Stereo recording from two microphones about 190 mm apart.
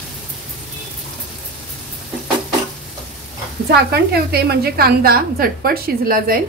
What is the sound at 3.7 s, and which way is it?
A woman's voice, 55° right (ahead or behind).